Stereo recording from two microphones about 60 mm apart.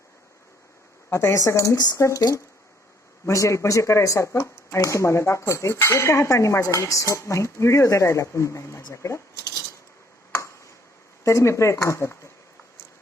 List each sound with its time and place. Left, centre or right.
1.1 s speech: left
1.7 s speech: left
3.2 s speech: left
11.2 s speech: left